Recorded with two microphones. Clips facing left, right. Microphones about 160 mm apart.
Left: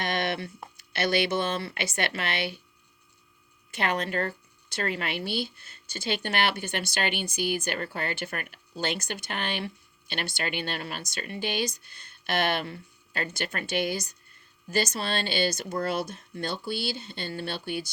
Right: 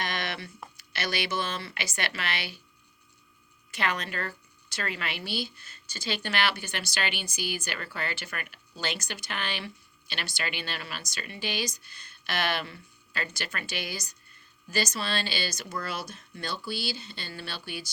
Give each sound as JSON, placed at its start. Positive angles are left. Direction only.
{"t": 0.0, "sound": "a sound", "side_deg": 55}
{"t": 0.4, "sound": "a sound", "side_deg": 30}
{"t": 0.9, "sound": "speech", "side_deg": 55}
{"t": 1.2, "sound": "speech", "side_deg": 25}
{"t": 1.5, "sound": "speech", "side_deg": 55}
{"t": 3.7, "sound": "speech", "side_deg": 55}